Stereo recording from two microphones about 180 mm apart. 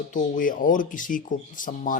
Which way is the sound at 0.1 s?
50° left (ahead or behind).